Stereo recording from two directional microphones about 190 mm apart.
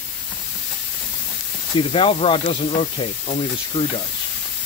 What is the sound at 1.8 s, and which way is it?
Speech, 30° left (ahead or behind).